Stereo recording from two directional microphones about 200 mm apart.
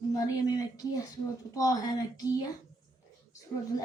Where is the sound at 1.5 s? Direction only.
15° left (ahead or behind).